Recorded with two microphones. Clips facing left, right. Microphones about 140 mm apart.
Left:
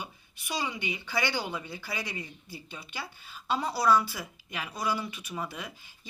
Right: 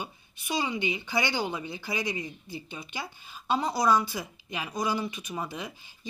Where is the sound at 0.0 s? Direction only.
20° right (ahead or behind).